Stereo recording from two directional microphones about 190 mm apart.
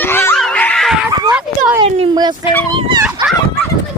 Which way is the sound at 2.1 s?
20° right (ahead or behind).